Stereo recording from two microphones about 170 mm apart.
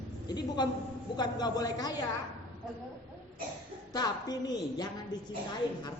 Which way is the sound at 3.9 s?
25° left (ahead or behind).